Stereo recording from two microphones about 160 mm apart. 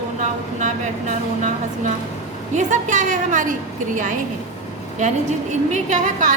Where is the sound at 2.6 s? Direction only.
50° right (ahead or behind).